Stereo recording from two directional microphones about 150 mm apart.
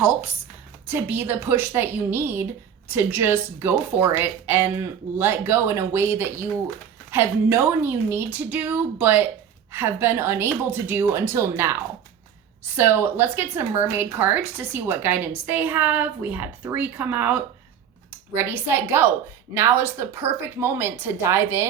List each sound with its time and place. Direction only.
0.9 s a woman's voice: 15° right (ahead or behind)
12.7 s a woman's voice: 15° right (ahead or behind)